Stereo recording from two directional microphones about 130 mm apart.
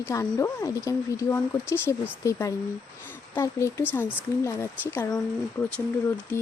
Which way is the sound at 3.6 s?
20° left (ahead or behind).